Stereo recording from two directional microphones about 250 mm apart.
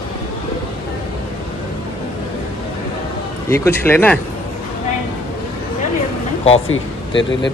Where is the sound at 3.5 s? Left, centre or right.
Centre.